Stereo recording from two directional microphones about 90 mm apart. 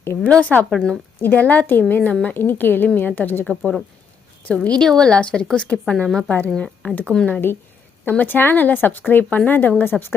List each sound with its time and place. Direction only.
0.3 s a woman's voice: 15° left (ahead or behind)
1.2 s a woman's voice: 20° left (ahead or behind)
8.0 s speech: 20° left (ahead or behind)